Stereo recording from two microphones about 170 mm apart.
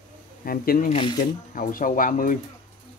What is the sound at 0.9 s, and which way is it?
Speech, 30° left (ahead or behind).